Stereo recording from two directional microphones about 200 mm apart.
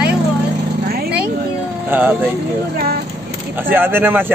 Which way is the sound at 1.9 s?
10° right (ahead or behind).